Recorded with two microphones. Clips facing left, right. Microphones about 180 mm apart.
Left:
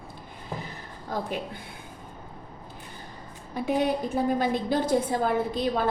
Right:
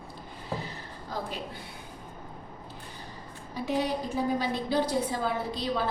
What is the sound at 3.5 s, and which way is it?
A woman's voice, 55° left (ahead or behind).